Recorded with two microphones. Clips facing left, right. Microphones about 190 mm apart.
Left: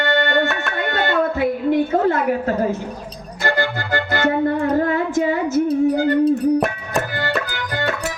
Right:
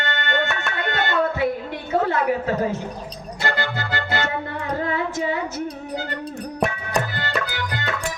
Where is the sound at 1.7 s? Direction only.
45° left (ahead or behind).